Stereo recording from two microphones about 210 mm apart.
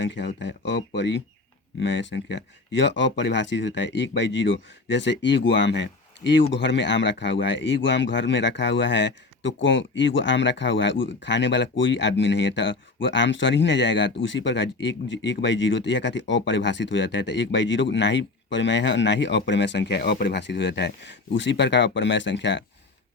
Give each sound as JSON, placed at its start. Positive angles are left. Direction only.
{"t": 0.0, "sound": "speech", "side_deg": 60}